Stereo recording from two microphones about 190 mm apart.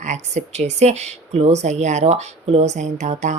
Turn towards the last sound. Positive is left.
turn(degrees=-40)  # may be behind; listen again after turning